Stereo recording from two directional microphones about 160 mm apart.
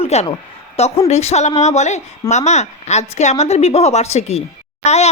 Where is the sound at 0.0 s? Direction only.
40° left (ahead or behind).